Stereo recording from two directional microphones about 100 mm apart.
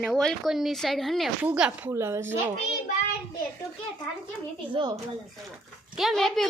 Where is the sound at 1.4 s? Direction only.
15° right (ahead or behind).